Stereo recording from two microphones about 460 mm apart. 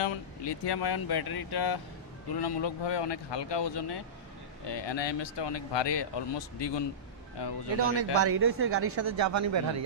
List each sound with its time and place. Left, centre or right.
0.0 s speech: left
7.8 s speech: right